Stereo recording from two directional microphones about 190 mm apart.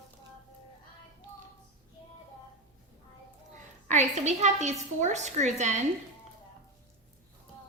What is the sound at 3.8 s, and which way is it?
A woman's voice, 35° right (ahead or behind).